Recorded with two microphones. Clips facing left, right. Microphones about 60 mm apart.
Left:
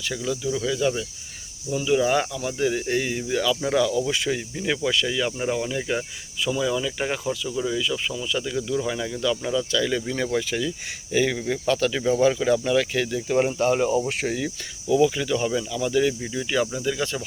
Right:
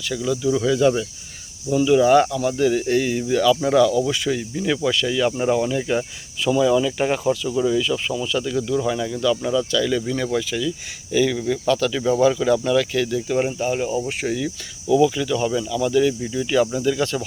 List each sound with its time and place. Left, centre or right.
0.2 s speech: centre
0.5 s speech: centre
2.6 s speech: centre
3.5 s speech: centre
3.8 s speech: centre
8.3 s speech: centre
9.7 s speech: left
10.5 s speech: left
13.5 s speech: left
14.3 s speech: left
14.9 s speech: left
15.4 s speech: centre